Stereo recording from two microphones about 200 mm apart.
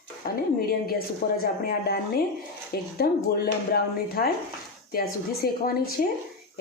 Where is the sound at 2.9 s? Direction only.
50° left (ahead or behind).